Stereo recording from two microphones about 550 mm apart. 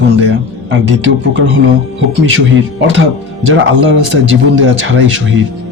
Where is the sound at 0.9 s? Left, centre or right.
Right.